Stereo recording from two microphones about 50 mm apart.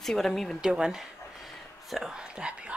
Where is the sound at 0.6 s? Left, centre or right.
Centre.